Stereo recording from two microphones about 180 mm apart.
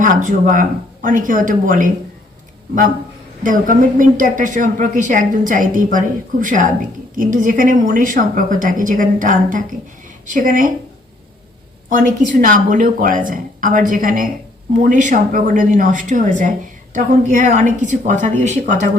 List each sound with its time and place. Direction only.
0.0 s speech: 45° right (ahead or behind)
3.4 s speech: 50° right (ahead or behind)
11.9 s speech: 50° right (ahead or behind)